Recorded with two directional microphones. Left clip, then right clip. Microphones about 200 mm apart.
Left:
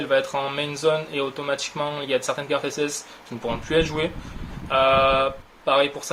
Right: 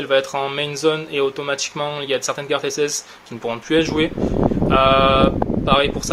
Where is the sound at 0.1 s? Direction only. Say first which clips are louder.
Right 4 dB; 30° right (ahead or behind).